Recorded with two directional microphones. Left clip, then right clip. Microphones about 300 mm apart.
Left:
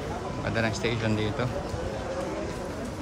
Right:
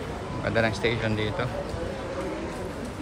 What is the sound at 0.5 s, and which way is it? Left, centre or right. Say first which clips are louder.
Speech: right 4 dB; centre.